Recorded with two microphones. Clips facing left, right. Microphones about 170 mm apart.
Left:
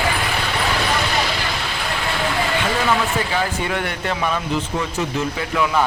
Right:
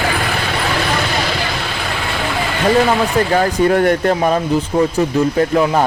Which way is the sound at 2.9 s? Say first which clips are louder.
Right 6 dB; 40° right (ahead or behind).